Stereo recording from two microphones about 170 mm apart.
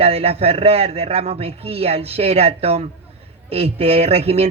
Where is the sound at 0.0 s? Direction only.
35° right (ahead or behind).